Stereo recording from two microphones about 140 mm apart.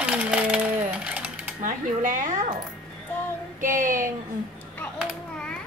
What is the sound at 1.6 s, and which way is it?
Speech, 70° right (ahead or behind).